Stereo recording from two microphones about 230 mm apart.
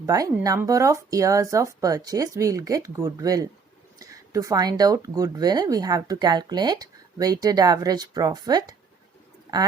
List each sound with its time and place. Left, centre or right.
0.0 s speech: centre